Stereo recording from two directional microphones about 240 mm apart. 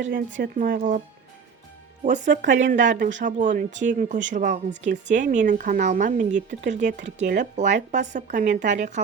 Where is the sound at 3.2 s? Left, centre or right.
Right.